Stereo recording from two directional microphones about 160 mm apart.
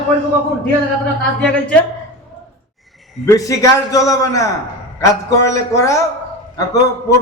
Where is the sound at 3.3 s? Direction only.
20° left (ahead or behind).